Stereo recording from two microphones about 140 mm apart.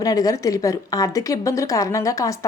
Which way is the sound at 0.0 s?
25° left (ahead or behind).